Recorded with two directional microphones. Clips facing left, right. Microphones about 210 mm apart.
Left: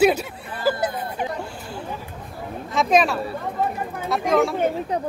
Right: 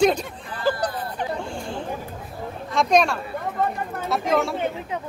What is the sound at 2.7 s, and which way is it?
Speech, centre (ahead or behind).